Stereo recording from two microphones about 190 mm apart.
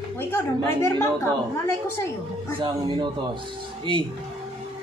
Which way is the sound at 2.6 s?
20° right (ahead or behind).